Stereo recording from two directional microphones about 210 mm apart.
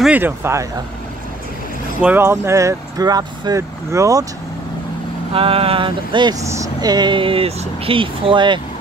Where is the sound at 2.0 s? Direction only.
10° right (ahead or behind).